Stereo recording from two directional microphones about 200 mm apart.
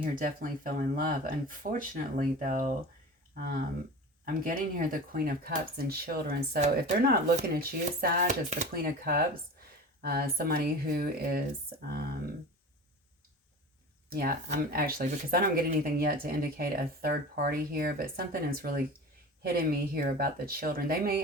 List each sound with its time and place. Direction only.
0.0 s speech: 45° right (ahead or behind)
14.1 s speech: 45° right (ahead or behind)